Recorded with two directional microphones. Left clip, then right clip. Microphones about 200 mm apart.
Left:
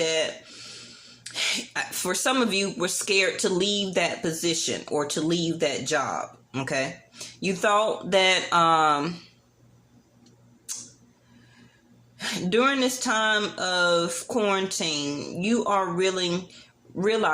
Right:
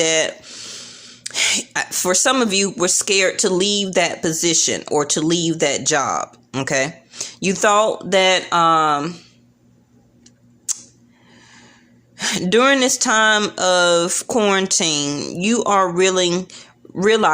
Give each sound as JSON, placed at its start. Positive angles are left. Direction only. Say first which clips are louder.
{"t": 0.0, "sound": "speech", "louder": "right 7 dB", "side_deg": -45}
{"t": 12.1, "sound": "speech", "louder": "right 8 dB", "side_deg": -50}